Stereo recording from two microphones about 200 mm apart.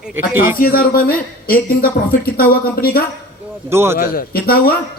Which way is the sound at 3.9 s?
45° left (ahead or behind).